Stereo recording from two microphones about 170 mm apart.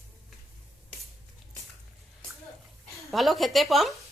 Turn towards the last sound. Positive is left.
turn(degrees=0)  # may be behind; listen again after turning